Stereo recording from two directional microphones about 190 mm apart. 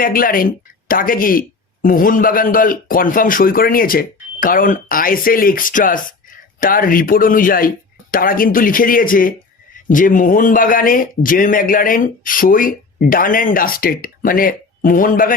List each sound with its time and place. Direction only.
0.0 s speech: 50° left (ahead or behind)